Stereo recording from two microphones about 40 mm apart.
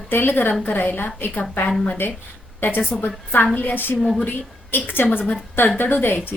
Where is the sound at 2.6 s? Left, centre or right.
Left.